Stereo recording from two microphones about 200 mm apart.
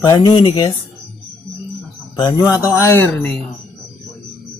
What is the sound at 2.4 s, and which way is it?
Speech, 10° right (ahead or behind).